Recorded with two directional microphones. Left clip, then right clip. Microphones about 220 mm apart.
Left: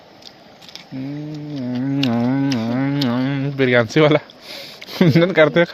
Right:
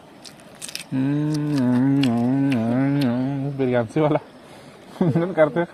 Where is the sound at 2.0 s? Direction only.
15° left (ahead or behind).